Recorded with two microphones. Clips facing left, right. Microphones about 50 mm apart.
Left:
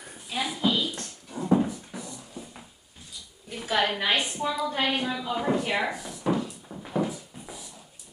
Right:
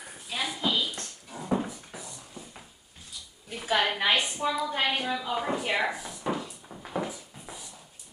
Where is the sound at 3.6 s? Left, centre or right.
Centre.